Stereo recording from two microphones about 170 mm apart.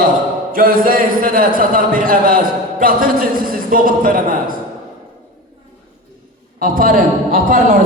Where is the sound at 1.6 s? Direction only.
55° right (ahead or behind).